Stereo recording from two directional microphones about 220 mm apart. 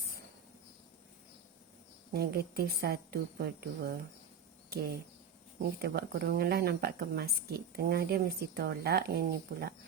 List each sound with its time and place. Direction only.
2.1 s speech: 45° right (ahead or behind)
5.8 s speech: 45° right (ahead or behind)